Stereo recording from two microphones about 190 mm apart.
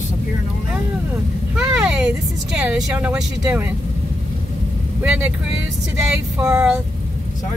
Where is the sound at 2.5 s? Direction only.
5° right (ahead or behind).